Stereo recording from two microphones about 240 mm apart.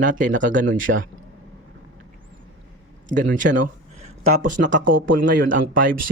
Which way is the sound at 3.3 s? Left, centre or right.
Right.